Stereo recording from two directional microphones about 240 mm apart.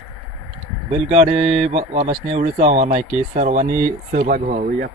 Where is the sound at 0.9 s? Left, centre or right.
Right.